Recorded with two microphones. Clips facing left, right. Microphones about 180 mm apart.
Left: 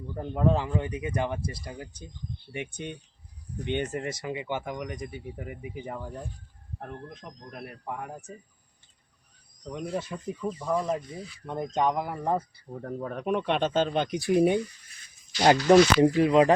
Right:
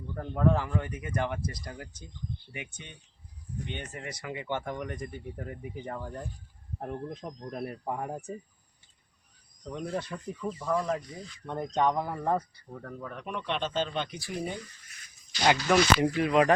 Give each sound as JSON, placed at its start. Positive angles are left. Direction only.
{"t": 0.1, "sound": "speech", "side_deg": 15}
{"t": 2.5, "sound": "speech", "side_deg": 30}
{"t": 3.8, "sound": "speech", "side_deg": 40}
{"t": 4.2, "sound": "speech", "side_deg": 20}
{"t": 4.4, "sound": "speech", "side_deg": 10}
{"t": 6.7, "sound": "speech", "side_deg": -15}
{"t": 7.1, "sound": "speech", "side_deg": -30}
{"t": 9.7, "sound": "speech", "side_deg": 10}
{"t": 12.8, "sound": "speech", "side_deg": 35}
{"t": 14.1, "sound": "speech", "side_deg": 70}
{"t": 15.4, "sound": "speech", "side_deg": 40}
{"t": 16.0, "sound": "speech", "side_deg": 25}